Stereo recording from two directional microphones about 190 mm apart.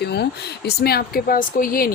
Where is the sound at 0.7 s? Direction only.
55° left (ahead or behind).